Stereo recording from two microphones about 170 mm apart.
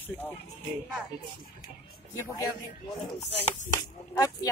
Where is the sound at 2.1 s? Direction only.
20° left (ahead or behind).